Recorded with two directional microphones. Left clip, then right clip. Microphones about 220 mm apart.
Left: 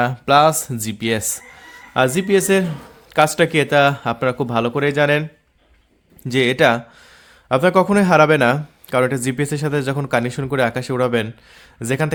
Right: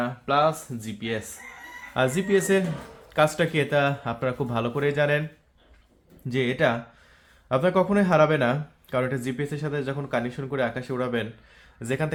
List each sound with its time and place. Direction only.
0.0 s speech: 55° left (ahead or behind)
1.9 s speech: 40° left (ahead or behind)
6.2 s speech: 50° left (ahead or behind)